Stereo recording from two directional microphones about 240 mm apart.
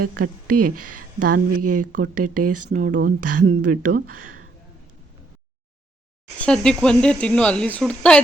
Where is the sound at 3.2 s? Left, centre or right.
Right.